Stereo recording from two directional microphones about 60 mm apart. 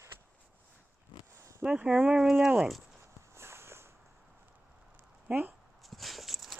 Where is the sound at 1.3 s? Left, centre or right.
Right.